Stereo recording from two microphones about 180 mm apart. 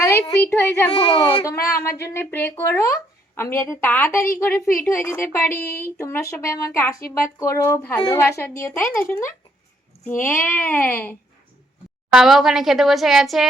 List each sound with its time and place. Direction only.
0.0 s a sound: 15° left (ahead or behind)
0.5 s speech: 15° left (ahead or behind)
12.1 s speech: centre (ahead or behind)